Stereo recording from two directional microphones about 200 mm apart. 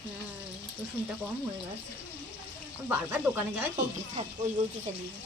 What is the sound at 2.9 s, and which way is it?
Speech, 10° right (ahead or behind).